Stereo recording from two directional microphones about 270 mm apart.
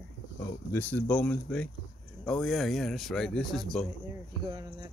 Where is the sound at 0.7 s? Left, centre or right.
Centre.